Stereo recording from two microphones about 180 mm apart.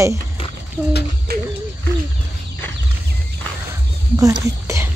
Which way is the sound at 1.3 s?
60° right (ahead or behind).